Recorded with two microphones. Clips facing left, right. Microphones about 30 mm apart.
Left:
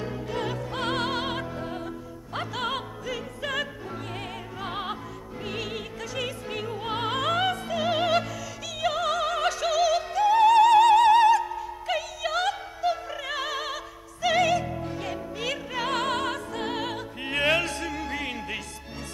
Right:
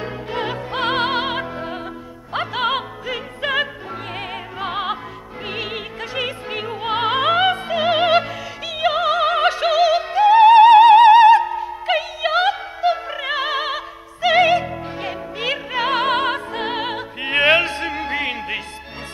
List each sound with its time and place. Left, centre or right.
0.0 s opera: right
4.6 s music: right
5.5 s opera: right
8.7 s music: right